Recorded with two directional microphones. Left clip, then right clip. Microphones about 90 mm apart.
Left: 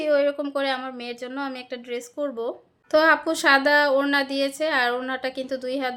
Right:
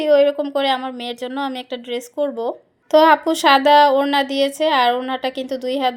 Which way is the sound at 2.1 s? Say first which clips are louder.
Right 7 dB; 30° right (ahead or behind).